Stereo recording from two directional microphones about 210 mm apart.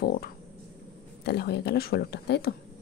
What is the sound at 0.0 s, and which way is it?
A woman's voice, 45° left (ahead or behind).